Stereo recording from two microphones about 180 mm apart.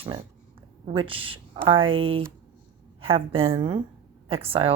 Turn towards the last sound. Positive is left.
turn(degrees=-30)  # may be behind; listen again after turning